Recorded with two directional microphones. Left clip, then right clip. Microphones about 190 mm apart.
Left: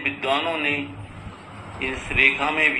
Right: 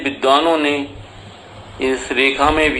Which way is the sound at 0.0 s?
45° right (ahead or behind).